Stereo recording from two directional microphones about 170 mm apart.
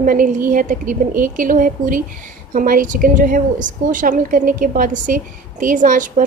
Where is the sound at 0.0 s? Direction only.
55° right (ahead or behind).